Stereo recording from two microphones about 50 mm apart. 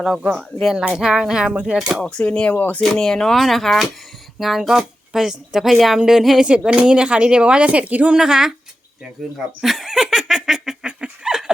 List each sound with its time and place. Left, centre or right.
0.6 s a woman's voice: centre
2.0 s speech: centre
2.5 s speech: left
2.8 s a woman's voice: centre
6.7 s speech: centre
8.1 s a woman's voice: centre
9.6 s a sound: centre